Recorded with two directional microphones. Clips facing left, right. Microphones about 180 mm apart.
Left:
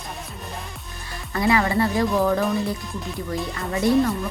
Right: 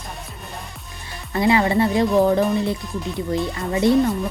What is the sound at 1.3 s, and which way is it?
A woman's voice, 25° right (ahead or behind).